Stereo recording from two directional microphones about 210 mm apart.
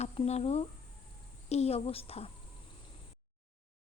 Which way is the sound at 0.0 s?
30° left (ahead or behind).